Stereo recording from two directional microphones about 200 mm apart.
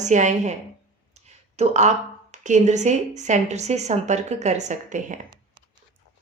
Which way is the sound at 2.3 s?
35° right (ahead or behind).